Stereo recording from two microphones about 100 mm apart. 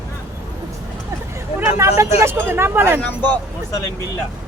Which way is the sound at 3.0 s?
15° left (ahead or behind).